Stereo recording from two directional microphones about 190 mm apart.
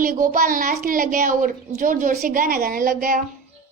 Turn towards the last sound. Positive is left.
turn(degrees=-45)  # may be behind; listen again after turning